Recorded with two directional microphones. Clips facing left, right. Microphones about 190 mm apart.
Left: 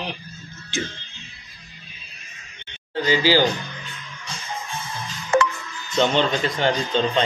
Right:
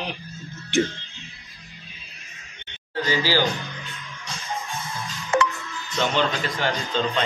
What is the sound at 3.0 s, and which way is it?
Speech, 15° left (ahead or behind).